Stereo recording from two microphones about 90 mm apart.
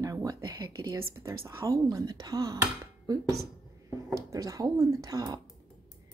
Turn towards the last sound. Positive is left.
turn(degrees=-40)  # may be behind; listen again after turning